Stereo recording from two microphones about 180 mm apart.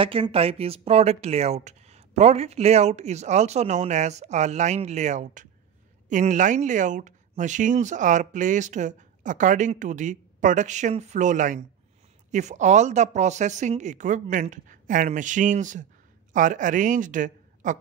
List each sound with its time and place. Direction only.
0.0 s speech: 30° right (ahead or behind); by 17.7 s 45° right (ahead or behind)